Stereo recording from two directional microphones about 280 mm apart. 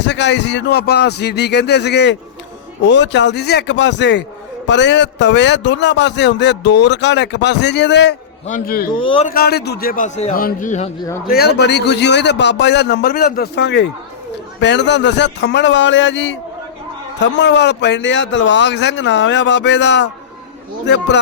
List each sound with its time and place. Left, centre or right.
0.0 s a man's voice: left
9.0 s speech: centre
9.3 s a man's voice: left